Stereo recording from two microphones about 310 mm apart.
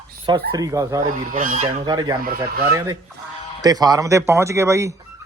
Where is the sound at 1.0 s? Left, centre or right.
Right.